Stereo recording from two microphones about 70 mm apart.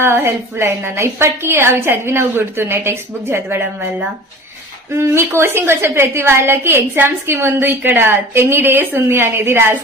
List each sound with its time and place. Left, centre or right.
0.0 s a woman's voice: right
4.9 s a woman's voice: right